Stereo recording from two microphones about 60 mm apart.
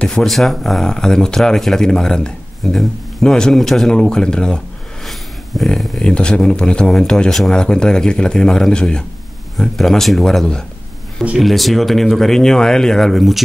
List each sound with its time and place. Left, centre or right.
0.0 s speech: centre
5.0 s a sound: centre
5.9 s speech: centre